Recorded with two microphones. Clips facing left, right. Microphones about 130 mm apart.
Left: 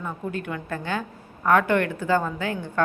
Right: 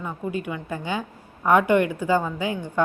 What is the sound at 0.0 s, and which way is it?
A woman's voice, 10° right (ahead or behind).